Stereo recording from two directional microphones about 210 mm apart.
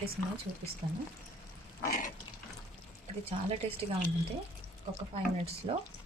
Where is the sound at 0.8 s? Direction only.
25° right (ahead or behind).